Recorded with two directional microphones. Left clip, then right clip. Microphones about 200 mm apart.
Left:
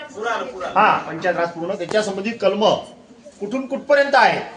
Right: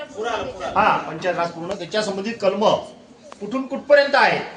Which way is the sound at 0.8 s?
30° left (ahead or behind).